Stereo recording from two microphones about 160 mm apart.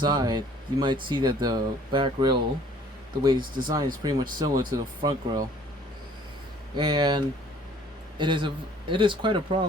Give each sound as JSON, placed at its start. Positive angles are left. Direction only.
{"t": 0.0, "sound": "speech", "side_deg": -25}
{"t": 6.7, "sound": "speech", "side_deg": -25}
{"t": 8.2, "sound": "a man's voice", "side_deg": -30}